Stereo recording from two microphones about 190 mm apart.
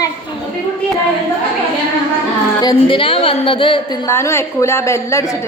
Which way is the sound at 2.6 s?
25° left (ahead or behind).